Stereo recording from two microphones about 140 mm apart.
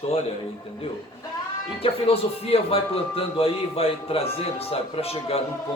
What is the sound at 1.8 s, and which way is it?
Speech, 45° left (ahead or behind).